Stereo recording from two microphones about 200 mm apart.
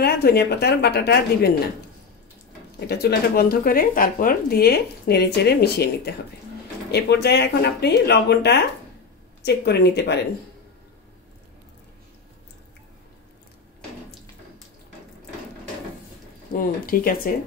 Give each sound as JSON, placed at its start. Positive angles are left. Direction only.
{"t": 0.0, "sound": "speech", "side_deg": 55}
{"t": 2.9, "sound": "speech", "side_deg": 50}
{"t": 16.5, "sound": "speech", "side_deg": 45}